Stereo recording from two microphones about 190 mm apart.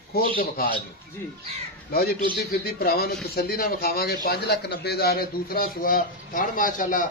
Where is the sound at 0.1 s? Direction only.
55° left (ahead or behind).